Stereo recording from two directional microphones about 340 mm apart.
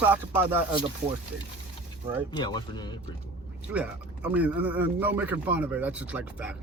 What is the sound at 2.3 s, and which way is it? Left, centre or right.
Speech, centre.